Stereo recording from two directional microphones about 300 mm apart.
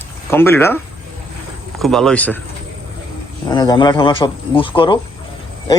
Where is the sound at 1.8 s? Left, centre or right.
Centre.